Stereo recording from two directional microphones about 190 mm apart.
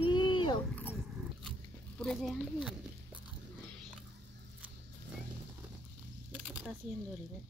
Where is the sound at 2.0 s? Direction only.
Centre (ahead or behind).